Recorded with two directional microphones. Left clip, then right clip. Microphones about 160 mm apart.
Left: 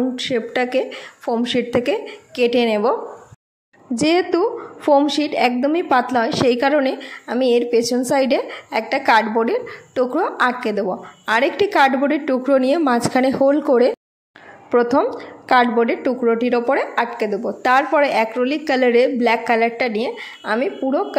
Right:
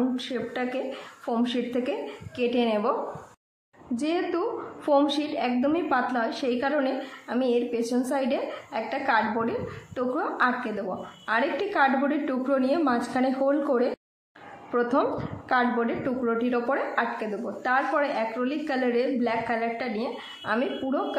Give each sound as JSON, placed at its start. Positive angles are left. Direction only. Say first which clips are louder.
{"t": 0.1, "sound": "a woman's voice", "louder": "left 10 dB", "side_deg": 35}